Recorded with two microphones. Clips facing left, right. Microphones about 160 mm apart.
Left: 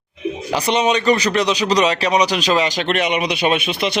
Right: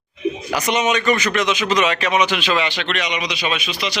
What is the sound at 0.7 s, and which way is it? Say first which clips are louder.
Speech: left 2 dB; 30° left (ahead or behind).